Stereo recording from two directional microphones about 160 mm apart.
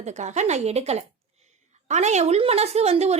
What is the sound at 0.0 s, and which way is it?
A woman's voice, 45° right (ahead or behind).